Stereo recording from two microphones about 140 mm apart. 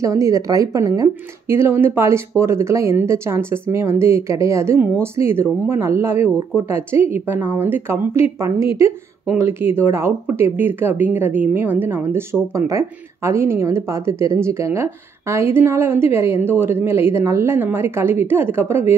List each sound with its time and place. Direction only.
0.0 s speech: 20° right (ahead or behind)